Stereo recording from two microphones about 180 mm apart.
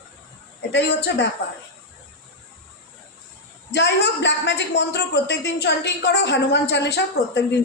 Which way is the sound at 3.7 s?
75° left (ahead or behind).